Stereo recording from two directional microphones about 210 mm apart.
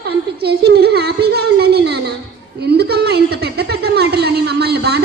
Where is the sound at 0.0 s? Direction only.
50° right (ahead or behind).